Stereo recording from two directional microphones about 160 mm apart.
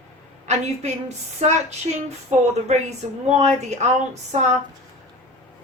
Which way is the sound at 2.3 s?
45° right (ahead or behind).